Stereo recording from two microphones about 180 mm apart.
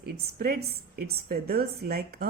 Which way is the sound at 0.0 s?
55° right (ahead or behind).